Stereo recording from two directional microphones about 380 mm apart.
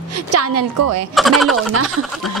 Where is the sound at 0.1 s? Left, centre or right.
Right.